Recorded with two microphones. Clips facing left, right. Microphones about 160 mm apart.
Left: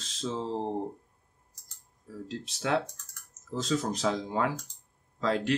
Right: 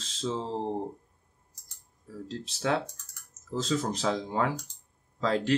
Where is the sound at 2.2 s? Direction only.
30° right (ahead or behind).